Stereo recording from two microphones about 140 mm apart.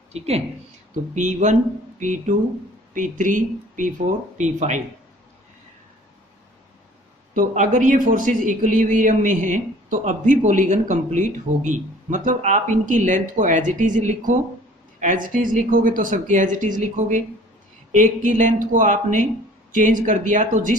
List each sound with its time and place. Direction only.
0.1 s speech: 50° right (ahead or behind)
1.1 s a man's voice: 60° right (ahead or behind)
7.3 s a man's voice: 65° right (ahead or behind)